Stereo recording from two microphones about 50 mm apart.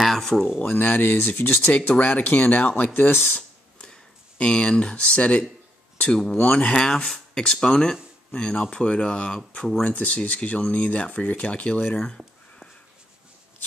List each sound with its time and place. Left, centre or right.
0.0 s speech: centre
0.6 s speech: left
3.3 s a sound: centre
6.1 s speech: centre
6.4 s speech: left